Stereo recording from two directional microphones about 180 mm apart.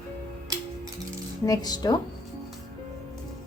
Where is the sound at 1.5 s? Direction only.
20° left (ahead or behind).